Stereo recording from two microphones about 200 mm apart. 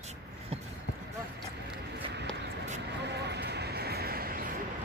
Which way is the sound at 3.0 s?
55° right (ahead or behind).